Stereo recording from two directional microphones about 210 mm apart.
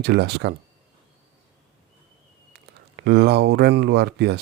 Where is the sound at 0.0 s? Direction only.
50° right (ahead or behind).